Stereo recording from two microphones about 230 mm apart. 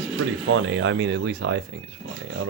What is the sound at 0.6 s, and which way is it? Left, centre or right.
Speech, right.